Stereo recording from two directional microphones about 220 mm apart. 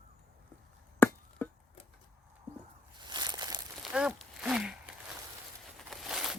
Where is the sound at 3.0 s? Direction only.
20° right (ahead or behind).